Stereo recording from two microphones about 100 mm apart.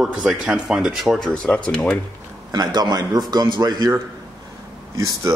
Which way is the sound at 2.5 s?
45° right (ahead or behind).